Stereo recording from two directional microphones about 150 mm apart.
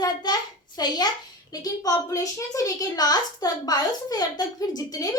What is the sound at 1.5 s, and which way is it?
A woman's voice, 25° left (ahead or behind).